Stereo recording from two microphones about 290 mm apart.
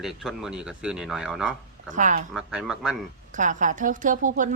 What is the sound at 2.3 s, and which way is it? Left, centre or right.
Speech, centre.